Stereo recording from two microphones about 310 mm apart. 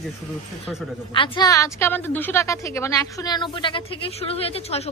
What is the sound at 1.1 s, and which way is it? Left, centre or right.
A woman's voice, centre.